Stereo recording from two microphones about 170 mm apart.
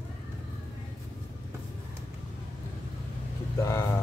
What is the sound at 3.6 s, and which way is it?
Speech, 15° left (ahead or behind).